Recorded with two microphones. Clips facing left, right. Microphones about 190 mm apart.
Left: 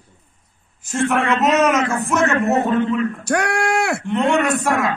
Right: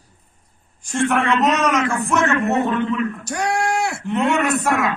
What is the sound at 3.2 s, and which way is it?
Speech, 60° left (ahead or behind).